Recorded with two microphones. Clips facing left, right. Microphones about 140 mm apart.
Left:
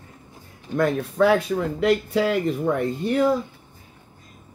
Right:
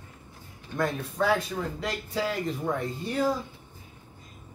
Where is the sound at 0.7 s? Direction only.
65° left (ahead or behind).